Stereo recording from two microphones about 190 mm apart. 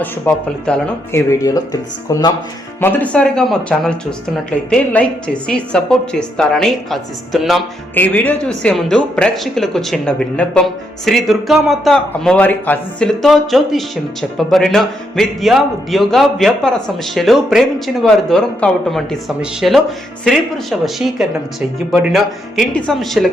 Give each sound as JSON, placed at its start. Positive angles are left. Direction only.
{"t": 0.0, "sound": "speech", "side_deg": 5}
{"t": 1.3, "sound": "speech", "side_deg": 15}